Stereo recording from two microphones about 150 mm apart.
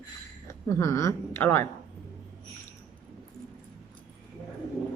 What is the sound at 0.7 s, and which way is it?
Speech, 20° left (ahead or behind).